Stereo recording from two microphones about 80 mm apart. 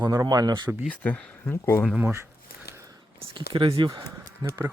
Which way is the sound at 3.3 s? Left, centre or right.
Right.